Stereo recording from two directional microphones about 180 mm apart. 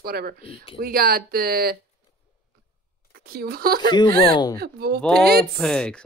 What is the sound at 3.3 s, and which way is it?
Speech, 55° right (ahead or behind).